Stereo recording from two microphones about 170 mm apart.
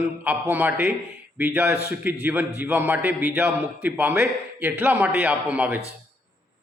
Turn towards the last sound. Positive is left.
turn(degrees=-10)  # may be behind; listen again after turning